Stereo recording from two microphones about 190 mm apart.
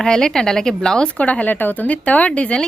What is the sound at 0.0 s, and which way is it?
Speech, 5° left (ahead or behind).